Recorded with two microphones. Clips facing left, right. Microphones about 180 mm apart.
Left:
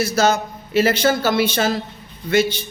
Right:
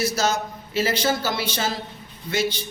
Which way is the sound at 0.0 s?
60° left (ahead or behind).